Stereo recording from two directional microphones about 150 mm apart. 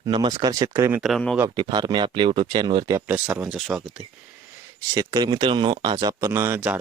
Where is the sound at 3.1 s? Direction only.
10° right (ahead or behind).